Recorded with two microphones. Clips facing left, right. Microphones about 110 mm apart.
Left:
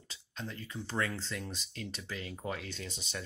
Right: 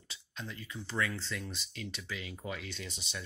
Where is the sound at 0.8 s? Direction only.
40° left (ahead or behind).